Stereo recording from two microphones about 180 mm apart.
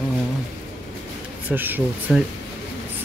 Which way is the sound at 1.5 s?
10° right (ahead or behind).